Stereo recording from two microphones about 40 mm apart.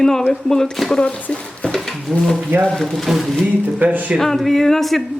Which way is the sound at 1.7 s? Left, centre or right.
Centre.